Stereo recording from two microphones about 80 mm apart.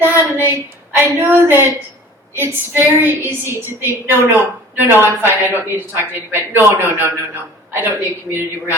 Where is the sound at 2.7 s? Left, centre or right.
Right.